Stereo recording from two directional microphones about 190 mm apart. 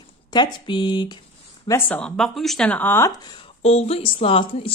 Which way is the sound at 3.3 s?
30° left (ahead or behind).